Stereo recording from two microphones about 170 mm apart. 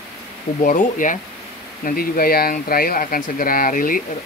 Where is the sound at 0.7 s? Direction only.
50° left (ahead or behind).